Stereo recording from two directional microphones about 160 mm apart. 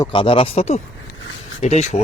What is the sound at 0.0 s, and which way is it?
Speech, 30° left (ahead or behind).